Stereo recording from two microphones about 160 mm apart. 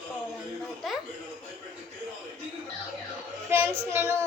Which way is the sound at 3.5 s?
15° right (ahead or behind).